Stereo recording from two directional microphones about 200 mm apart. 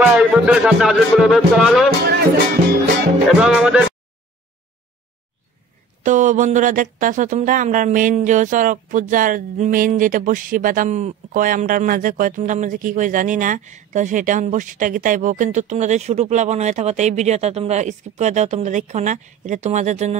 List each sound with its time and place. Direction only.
0.0 s speech: 5° right (ahead or behind)
3.3 s speech: 5° right (ahead or behind)
6.0 s speech: 40° right (ahead or behind)